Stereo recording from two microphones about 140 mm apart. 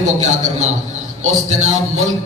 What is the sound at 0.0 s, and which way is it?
A man's voice, 60° right (ahead or behind).